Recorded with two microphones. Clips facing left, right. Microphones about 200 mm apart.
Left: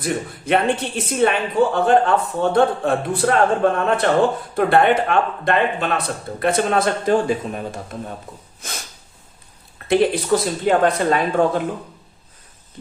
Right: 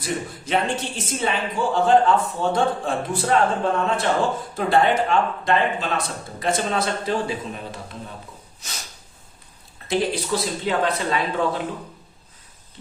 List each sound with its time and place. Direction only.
0.0 s speech: 60° left (ahead or behind)
8.6 s a sound: 55° left (ahead or behind)
9.7 s speech: 60° left (ahead or behind)